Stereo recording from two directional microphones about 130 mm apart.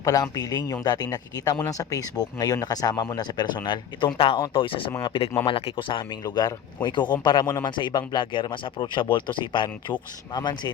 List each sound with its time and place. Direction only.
0.0 s speech: 30° left (ahead or behind)